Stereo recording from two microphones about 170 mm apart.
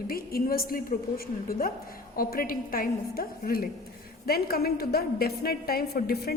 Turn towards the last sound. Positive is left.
turn(degrees=70)  # may be behind; listen again after turning